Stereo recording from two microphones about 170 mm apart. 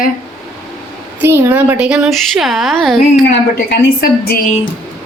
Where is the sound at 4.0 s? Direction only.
65° left (ahead or behind).